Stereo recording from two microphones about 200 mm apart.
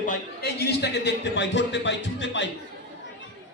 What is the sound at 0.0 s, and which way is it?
A man's voice, 45° left (ahead or behind).